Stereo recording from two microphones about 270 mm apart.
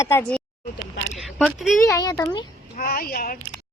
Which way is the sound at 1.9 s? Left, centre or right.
Centre.